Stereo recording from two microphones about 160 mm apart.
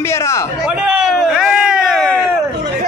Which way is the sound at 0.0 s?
15° left (ahead or behind).